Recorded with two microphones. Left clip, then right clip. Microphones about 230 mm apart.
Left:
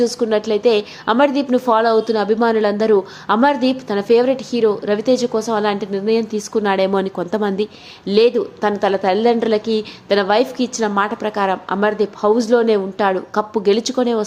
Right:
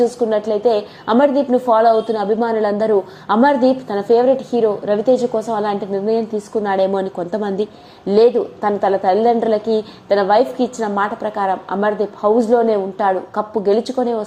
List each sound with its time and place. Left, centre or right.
0.0 s a woman's voice: centre